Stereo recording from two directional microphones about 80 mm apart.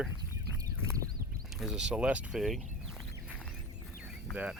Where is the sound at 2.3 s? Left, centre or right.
Centre.